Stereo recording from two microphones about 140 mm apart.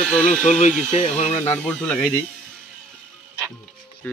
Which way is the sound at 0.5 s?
60° left (ahead or behind).